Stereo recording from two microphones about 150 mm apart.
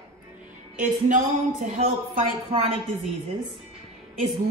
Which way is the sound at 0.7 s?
60° right (ahead or behind).